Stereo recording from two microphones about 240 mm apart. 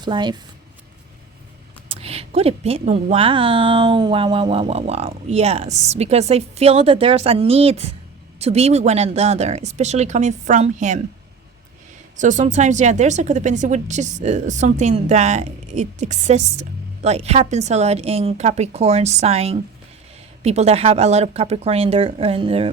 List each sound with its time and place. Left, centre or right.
0.0 s a woman's voice: centre
1.9 s a woman's voice: right
12.1 s a woman's voice: right